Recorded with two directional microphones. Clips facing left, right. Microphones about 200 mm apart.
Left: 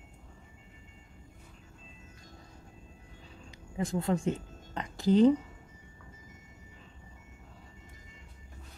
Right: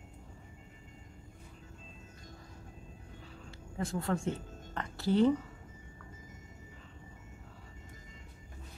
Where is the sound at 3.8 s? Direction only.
15° left (ahead or behind).